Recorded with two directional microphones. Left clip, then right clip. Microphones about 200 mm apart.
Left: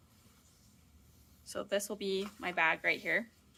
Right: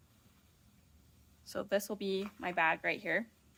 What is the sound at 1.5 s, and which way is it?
A woman's voice, 40° right (ahead or behind).